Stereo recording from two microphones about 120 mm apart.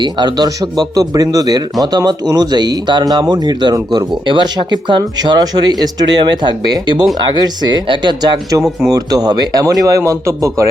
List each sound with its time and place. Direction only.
0.0 s speech: 35° right (ahead or behind)